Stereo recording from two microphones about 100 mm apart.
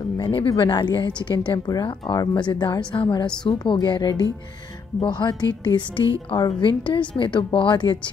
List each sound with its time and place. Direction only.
0.3 s speech: 55° left (ahead or behind)